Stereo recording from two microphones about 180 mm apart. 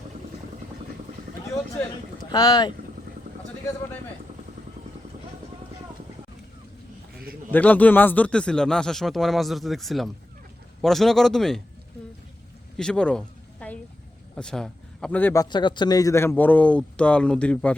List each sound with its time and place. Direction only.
2.3 s speech: 20° left (ahead or behind)
7.5 s a man's voice: 10° left (ahead or behind)
12.7 s a sound: 5° left (ahead or behind)
14.3 s a man's voice: 5° left (ahead or behind)